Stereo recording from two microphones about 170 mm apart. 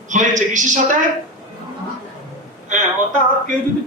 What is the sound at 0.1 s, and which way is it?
Speech, 45° right (ahead or behind).